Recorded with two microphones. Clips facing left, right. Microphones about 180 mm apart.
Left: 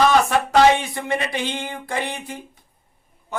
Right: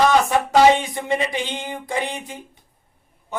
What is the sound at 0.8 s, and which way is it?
Mantra, 15° right (ahead or behind).